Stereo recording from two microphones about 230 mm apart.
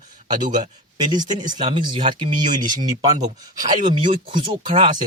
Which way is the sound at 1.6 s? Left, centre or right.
Right.